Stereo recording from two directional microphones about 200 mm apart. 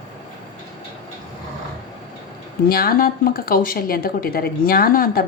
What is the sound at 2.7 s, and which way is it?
Speech, 50° left (ahead or behind).